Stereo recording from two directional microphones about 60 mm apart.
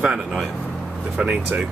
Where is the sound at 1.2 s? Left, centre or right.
Right.